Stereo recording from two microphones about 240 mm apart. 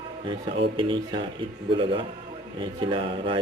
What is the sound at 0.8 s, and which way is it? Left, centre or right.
A man's voice, centre.